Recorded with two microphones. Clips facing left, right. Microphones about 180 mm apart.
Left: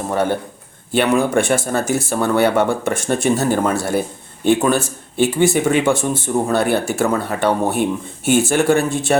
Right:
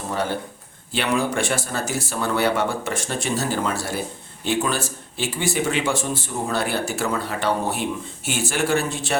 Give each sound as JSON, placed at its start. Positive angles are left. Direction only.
{"t": 0.1, "sound": "a man's voice", "side_deg": 55}